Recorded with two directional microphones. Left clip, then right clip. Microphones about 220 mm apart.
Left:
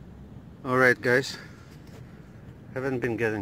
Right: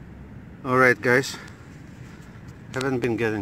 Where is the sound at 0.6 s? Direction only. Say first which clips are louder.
Right 3 dB; centre (ahead or behind).